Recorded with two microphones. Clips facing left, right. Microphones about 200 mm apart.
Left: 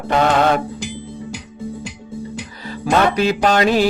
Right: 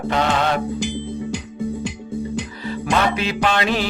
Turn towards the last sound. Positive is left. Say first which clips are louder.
# left 5 dB
turn(degrees=40)  # may be behind; listen again after turning